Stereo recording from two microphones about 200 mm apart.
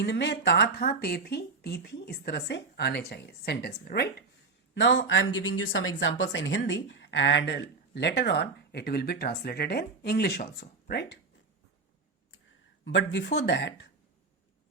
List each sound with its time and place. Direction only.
0.0 s speech: 60° left (ahead or behind)
4.7 s speech: 65° left (ahead or behind)
12.8 s speech: 65° left (ahead or behind)